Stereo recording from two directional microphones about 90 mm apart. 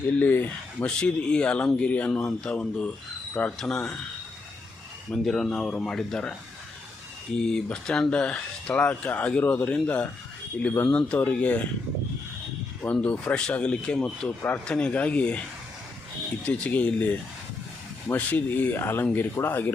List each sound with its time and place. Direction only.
0.0 s speech: 15° left (ahead or behind)
5.1 s speech: 5° left (ahead or behind)
7.3 s speech: 10° left (ahead or behind)
12.8 s speech: 15° left (ahead or behind)
16.5 s speech: 15° left (ahead or behind)